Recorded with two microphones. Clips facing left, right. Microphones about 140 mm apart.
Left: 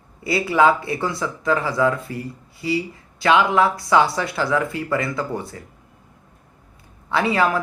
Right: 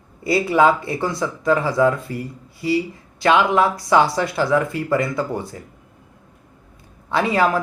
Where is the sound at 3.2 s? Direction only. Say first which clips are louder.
Right 1 dB; 20° right (ahead or behind).